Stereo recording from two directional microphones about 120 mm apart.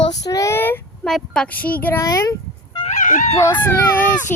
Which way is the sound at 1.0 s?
5° left (ahead or behind).